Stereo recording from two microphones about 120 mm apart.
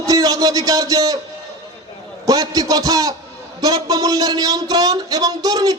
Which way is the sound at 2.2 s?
30° right (ahead or behind).